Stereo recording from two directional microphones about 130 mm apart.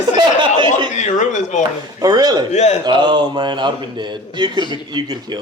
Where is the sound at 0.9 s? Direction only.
70° left (ahead or behind).